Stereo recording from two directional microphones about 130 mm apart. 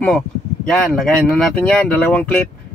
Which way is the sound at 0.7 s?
5° left (ahead or behind).